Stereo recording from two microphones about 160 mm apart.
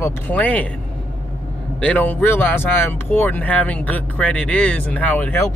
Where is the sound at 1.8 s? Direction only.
10° left (ahead or behind).